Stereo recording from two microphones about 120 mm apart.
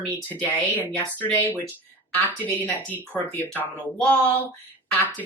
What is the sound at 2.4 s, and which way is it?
Speech, 15° left (ahead or behind).